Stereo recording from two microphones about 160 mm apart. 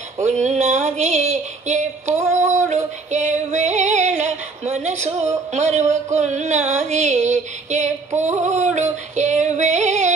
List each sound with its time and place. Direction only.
0.2 s a sound: 45° right (ahead or behind)
3.1 s female singing: 45° right (ahead or behind)
5.5 s music: 45° right (ahead or behind)
6.1 s female singing: 45° right (ahead or behind)